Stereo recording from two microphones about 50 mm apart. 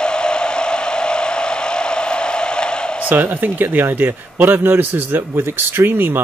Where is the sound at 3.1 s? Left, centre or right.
Right.